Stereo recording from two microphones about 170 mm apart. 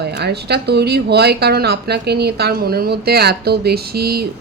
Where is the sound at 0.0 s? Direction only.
75° right (ahead or behind).